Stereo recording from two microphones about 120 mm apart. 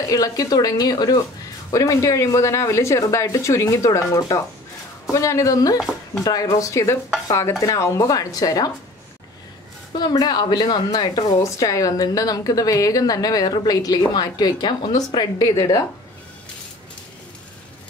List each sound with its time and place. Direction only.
0.1 s a woman's voice: 30° left (ahead or behind)
9.9 s a woman's voice: 35° left (ahead or behind)